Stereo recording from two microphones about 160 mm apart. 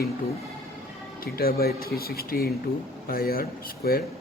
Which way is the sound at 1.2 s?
70° left (ahead or behind).